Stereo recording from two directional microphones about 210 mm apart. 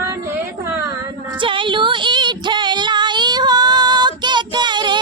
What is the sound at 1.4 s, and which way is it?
Female singing, 25° right (ahead or behind).